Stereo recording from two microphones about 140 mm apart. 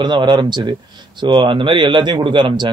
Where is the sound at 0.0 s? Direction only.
35° right (ahead or behind).